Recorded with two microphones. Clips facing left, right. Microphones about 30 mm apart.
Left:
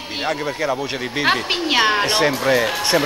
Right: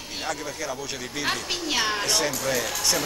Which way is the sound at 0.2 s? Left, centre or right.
Left.